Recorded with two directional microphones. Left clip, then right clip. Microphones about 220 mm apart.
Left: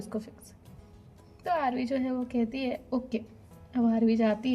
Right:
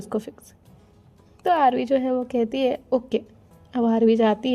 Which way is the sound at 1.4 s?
45° right (ahead or behind).